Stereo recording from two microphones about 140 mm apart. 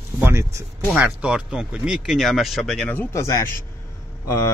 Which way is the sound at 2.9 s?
15° left (ahead or behind).